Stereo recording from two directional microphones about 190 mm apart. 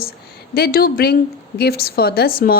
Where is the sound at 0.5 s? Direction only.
55° left (ahead or behind).